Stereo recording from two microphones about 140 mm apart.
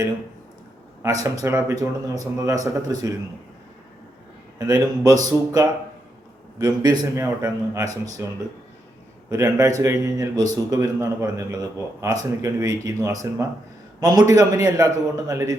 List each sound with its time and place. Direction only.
1.0 s speech: 25° right (ahead or behind)
4.5 s speech: 25° right (ahead or behind)